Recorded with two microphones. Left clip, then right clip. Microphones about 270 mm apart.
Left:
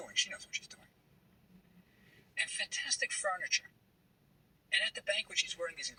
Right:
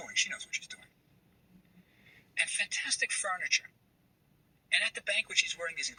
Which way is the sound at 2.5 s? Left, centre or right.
Right.